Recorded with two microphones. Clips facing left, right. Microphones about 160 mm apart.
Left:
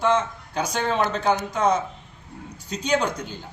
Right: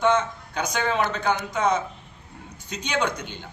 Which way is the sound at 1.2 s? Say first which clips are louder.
Left 2 dB; 35° left (ahead or behind).